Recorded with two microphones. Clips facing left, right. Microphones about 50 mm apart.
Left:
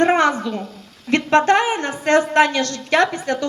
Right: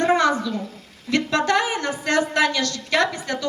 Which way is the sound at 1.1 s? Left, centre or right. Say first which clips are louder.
Left 5 dB; left.